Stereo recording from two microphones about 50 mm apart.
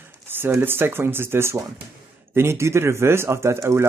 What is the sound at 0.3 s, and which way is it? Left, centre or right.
Speech, right.